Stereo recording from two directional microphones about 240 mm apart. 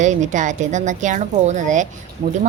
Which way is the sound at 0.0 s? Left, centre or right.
Right.